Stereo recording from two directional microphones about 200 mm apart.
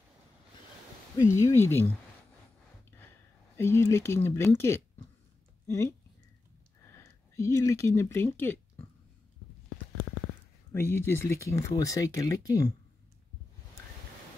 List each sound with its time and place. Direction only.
1.3 s speech: 15° left (ahead or behind)
3.5 s speech: 15° left (ahead or behind)
7.0 s speech: 15° left (ahead or behind)
10.7 s speech: 10° left (ahead or behind)